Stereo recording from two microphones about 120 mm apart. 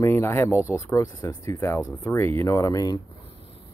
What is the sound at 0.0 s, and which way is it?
Speech, 20° left (ahead or behind).